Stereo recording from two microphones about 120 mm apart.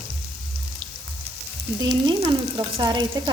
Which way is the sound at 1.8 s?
35° right (ahead or behind).